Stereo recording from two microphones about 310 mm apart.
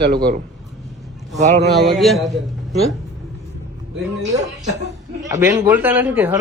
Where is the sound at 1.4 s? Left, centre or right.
Right.